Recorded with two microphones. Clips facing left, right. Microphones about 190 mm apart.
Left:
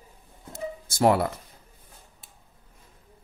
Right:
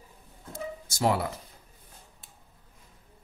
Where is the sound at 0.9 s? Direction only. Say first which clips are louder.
Left 6 dB; 55° left (ahead or behind).